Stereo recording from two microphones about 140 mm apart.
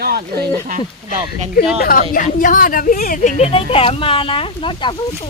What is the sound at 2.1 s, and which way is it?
A woman's voice, 75° left (ahead or behind).